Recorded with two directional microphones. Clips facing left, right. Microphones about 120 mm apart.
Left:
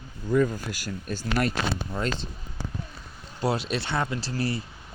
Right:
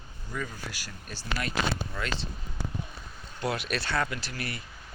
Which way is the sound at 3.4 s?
30° left (ahead or behind).